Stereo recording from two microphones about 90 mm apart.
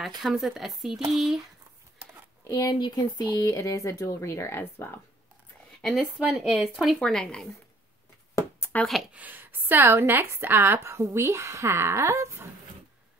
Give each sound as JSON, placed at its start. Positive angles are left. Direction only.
{"t": 0.2, "sound": "speech", "side_deg": 0}
{"t": 2.4, "sound": "speech", "side_deg": 35}
{"t": 2.7, "sound": "speech", "side_deg": 50}
{"t": 3.3, "sound": "speech", "side_deg": 35}
{"t": 5.8, "sound": "speech", "side_deg": 0}
{"t": 7.0, "sound": "speech", "side_deg": 10}
{"t": 8.4, "sound": "a sound", "side_deg": 25}
{"t": 8.8, "sound": "speech", "side_deg": 0}
{"t": 9.1, "sound": "a woman's voice", "side_deg": -20}